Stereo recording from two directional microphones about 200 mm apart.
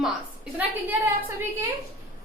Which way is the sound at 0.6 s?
10° right (ahead or behind).